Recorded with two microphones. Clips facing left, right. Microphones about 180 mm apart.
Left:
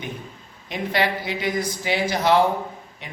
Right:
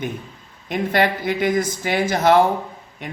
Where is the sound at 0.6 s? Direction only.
50° right (ahead or behind).